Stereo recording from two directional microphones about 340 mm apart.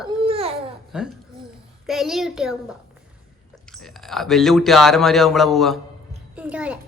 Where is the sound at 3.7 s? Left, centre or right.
Centre.